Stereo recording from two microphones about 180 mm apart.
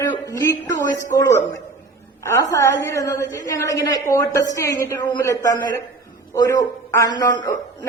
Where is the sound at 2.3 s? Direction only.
15° left (ahead or behind).